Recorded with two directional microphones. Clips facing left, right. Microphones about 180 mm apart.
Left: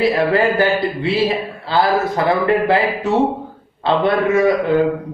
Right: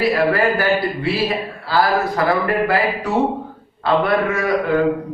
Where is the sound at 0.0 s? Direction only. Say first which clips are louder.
Left 1 dB; 25° left (ahead or behind).